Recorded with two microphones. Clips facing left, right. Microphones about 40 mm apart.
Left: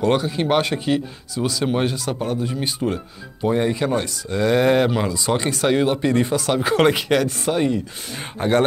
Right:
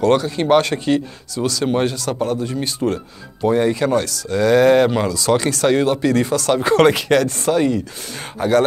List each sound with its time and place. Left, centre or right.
0.0 s speech: centre
2.8 s speech: centre
3.5 s speech: centre
6.4 s speech: centre
8.4 s speech: left